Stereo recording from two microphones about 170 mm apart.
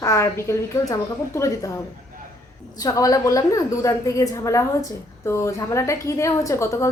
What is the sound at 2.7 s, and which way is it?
A woman's voice, 20° left (ahead or behind).